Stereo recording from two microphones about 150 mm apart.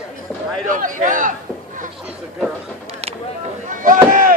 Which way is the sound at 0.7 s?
60° right (ahead or behind).